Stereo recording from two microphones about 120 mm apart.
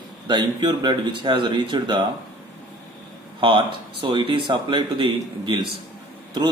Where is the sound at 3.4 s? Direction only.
45° right (ahead or behind).